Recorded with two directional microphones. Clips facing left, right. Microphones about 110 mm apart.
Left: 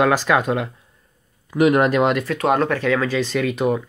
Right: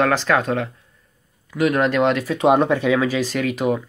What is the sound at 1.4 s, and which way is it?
Speech, 20° left (ahead or behind).